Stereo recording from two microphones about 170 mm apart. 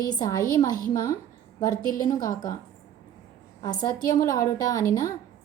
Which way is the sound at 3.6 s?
25° left (ahead or behind).